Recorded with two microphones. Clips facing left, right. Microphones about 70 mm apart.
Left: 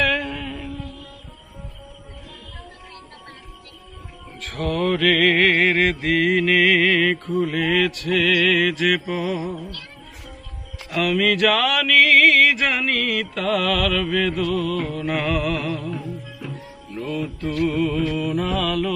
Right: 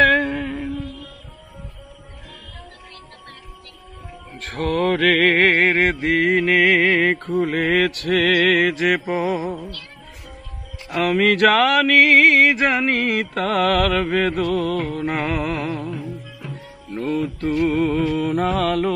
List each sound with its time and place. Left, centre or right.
0.0 s music: right
4.4 s music: right
8.3 s music: right
10.9 s music: right
11.2 s mantra: right
11.5 s mantra: right
16.9 s mantra: right